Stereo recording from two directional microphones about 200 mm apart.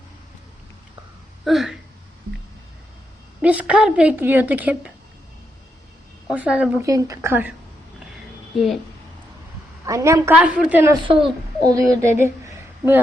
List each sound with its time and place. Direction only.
1.5 s speech: centre (ahead or behind)
3.4 s a woman's voice: 5° right (ahead or behind)
6.2 s a woman's voice: 5° right (ahead or behind)
8.5 s a woman's voice: centre (ahead or behind)
9.8 s a woman's voice: 15° right (ahead or behind)
10.9 s a woman's voice: 25° right (ahead or behind)